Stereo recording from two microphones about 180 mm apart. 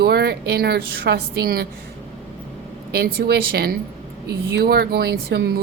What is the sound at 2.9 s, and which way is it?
A woman's voice, 60° right (ahead or behind).